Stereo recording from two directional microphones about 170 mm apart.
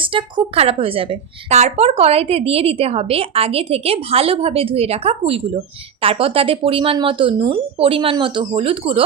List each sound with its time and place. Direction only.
0.0 s a woman's voice: 30° right (ahead or behind)